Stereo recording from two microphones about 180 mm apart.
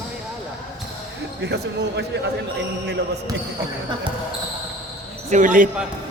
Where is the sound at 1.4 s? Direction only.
70° right (ahead or behind).